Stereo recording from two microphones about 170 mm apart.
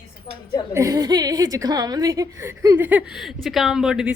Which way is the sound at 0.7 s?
20° right (ahead or behind).